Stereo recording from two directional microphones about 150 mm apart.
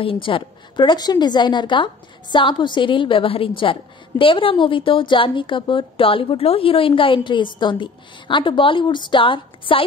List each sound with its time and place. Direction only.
0.0 s a woman's voice: 35° left (ahead or behind)